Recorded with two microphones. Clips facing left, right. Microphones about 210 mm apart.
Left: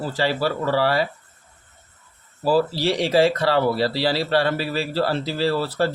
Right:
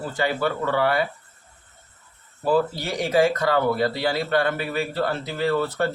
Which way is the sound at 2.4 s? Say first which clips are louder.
Left 2 dB; 35° left (ahead or behind).